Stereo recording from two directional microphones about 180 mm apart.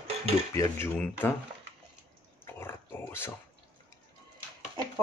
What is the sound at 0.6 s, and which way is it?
Speech, 15° left (ahead or behind).